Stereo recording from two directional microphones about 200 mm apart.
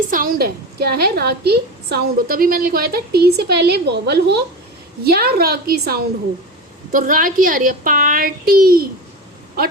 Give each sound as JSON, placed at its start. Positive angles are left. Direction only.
{"t": 0.1, "sound": "a woman's voice", "side_deg": -45}